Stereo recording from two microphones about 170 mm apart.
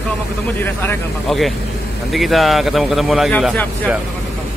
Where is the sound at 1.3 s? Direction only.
Centre (ahead or behind).